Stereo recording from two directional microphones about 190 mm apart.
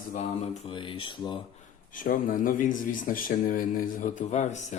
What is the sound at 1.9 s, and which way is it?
A man's voice, 45° left (ahead or behind).